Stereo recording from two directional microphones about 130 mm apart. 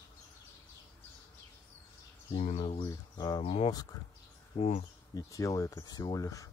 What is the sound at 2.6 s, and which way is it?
Speech, 40° left (ahead or behind).